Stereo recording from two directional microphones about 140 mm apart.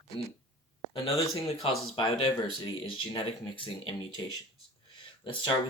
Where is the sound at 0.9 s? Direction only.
40° left (ahead or behind).